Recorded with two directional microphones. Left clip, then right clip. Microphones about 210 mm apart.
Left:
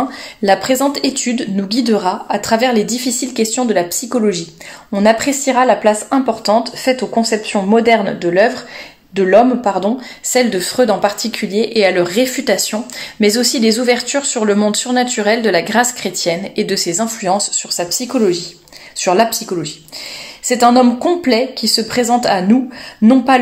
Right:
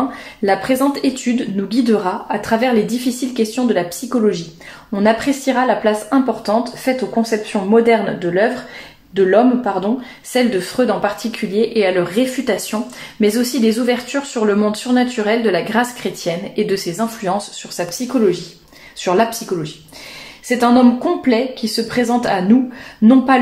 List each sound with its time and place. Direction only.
0.4 s speech: 35° left (ahead or behind)
20.4 s speech: 35° left (ahead or behind)